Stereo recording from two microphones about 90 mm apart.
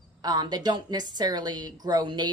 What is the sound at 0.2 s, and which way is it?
A woman's voice, 50° right (ahead or behind).